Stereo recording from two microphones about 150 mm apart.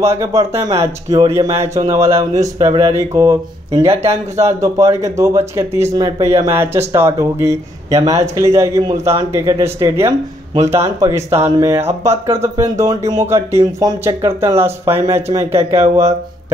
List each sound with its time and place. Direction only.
0.0 s speech: 20° right (ahead or behind)